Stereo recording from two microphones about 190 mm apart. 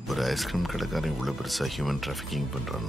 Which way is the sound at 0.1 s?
Centre (ahead or behind).